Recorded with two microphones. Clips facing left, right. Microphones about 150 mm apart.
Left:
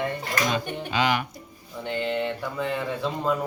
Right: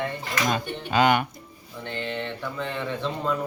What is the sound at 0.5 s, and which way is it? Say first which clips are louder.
Speech: right 2 dB; 50° right (ahead or behind).